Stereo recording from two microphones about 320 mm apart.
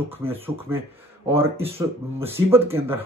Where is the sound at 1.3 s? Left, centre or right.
Centre.